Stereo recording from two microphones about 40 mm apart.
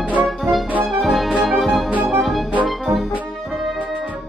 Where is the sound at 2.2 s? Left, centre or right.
Centre.